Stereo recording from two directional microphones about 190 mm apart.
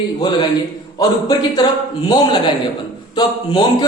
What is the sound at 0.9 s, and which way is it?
Speech, 20° left (ahead or behind).